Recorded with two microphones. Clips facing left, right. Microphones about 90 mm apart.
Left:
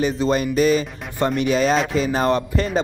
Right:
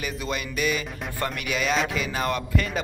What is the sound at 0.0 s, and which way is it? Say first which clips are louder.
Speech: left 11 dB; 35° left (ahead or behind).